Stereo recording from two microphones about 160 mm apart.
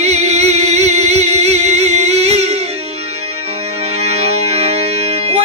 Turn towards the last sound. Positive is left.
turn(degrees=-40)  # may be behind; listen again after turning